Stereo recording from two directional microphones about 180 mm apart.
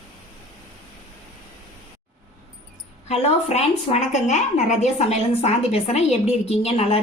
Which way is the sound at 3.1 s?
35° left (ahead or behind).